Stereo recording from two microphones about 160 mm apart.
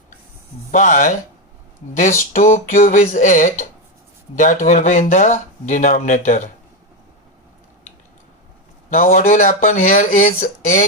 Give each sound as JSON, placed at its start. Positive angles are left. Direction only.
{"t": 0.7, "sound": "speech", "side_deg": 50}
{"t": 8.9, "sound": "speech", "side_deg": 55}